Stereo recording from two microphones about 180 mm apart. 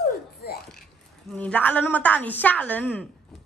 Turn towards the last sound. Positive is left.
turn(degrees=10)  # may be behind; listen again after turning